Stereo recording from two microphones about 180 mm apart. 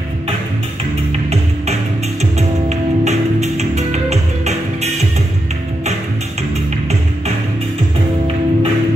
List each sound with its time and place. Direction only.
2.3 s music: 40° right (ahead or behind)